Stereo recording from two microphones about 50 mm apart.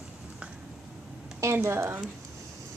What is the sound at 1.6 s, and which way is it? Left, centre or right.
Speech, right.